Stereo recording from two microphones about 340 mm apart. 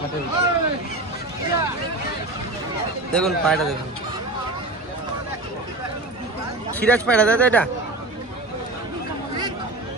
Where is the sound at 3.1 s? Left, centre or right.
Centre.